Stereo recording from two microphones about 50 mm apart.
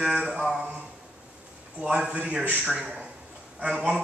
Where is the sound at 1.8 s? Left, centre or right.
Right.